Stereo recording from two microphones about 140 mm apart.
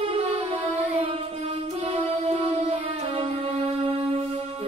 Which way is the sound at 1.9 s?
45° right (ahead or behind).